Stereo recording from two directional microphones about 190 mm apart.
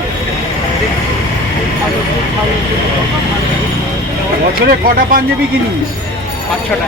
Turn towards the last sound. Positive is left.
turn(degrees=-50)  # may be behind; listen again after turning